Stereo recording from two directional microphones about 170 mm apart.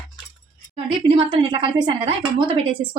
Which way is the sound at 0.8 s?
30° right (ahead or behind).